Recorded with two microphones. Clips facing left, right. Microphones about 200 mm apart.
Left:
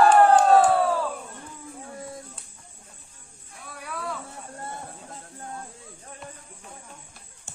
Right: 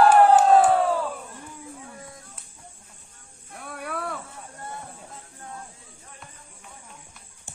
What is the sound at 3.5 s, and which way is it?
Cricket, 55° right (ahead or behind).